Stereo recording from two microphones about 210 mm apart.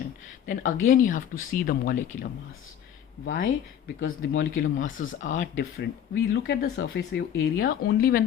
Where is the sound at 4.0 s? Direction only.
60° left (ahead or behind).